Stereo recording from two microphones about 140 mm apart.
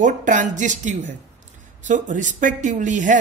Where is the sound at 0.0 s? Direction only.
65° right (ahead or behind).